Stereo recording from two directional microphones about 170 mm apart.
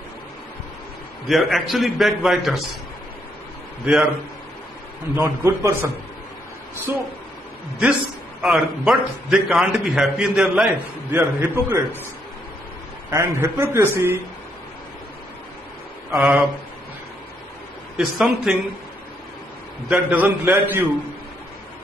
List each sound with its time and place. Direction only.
1.2 s a man's voice: centre (ahead or behind)
5.1 s a man's voice: 15° right (ahead or behind)
8.4 s a man's voice: 5° right (ahead or behind)
13.1 s a man's voice: 15° right (ahead or behind)
16.1 s a man's voice: 5° right (ahead or behind)
17.9 s a man's voice: 5° right (ahead or behind)
19.9 s a man's voice: 10° right (ahead or behind)